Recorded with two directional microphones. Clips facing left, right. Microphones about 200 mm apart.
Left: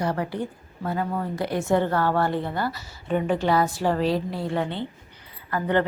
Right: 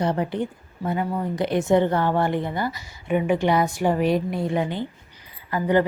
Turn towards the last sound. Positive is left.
turn(degrees=-10)  # may be behind; listen again after turning